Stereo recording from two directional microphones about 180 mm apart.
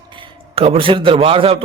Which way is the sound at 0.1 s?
30° right (ahead or behind).